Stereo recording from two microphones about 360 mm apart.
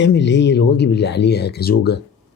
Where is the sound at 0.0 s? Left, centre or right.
Left.